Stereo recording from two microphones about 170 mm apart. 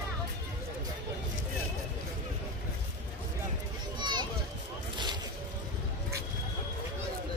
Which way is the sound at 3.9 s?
25° right (ahead or behind).